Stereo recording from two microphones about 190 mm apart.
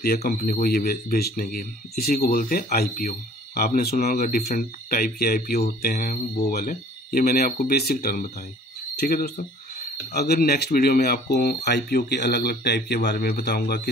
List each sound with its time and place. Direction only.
0.0 s speech: 50° left (ahead or behind)